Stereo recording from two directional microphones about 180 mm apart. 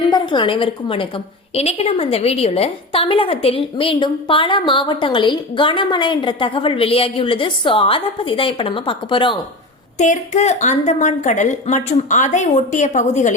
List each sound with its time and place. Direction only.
0.1 s a woman's voice: 25° left (ahead or behind)
10.0 s a woman's voice: 40° left (ahead or behind)